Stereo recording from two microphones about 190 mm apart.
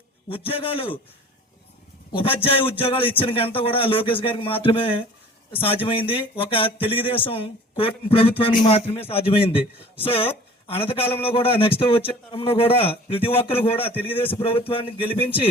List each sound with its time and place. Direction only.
0.3 s a man's voice: 30° left (ahead or behind)
2.1 s a man's voice: 30° left (ahead or behind)